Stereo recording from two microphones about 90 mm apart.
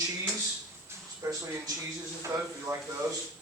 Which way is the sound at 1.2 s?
35° right (ahead or behind).